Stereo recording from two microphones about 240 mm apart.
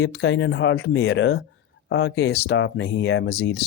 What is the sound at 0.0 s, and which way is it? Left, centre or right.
Speech, left.